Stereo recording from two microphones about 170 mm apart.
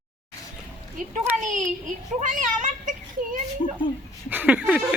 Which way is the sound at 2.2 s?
50° right (ahead or behind).